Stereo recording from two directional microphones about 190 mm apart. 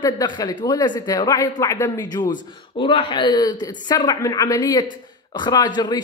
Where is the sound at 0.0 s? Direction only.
20° left (ahead or behind).